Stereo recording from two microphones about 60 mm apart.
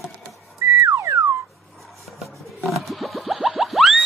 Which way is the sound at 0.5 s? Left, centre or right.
Right.